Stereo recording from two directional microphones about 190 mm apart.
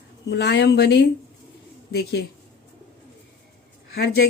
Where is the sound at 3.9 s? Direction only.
55° left (ahead or behind).